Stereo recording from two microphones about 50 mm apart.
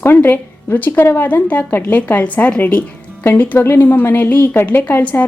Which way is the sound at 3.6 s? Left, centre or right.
Left.